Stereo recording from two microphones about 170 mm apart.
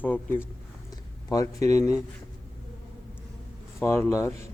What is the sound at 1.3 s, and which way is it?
Speech, 20° left (ahead or behind).